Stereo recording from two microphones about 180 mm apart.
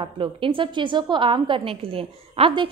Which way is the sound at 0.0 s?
30° right (ahead or behind).